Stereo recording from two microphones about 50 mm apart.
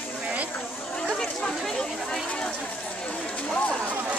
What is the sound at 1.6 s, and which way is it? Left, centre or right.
Speech, centre.